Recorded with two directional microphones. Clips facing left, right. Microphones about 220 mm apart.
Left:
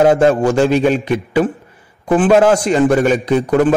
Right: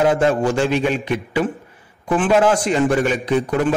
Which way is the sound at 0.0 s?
45° left (ahead or behind).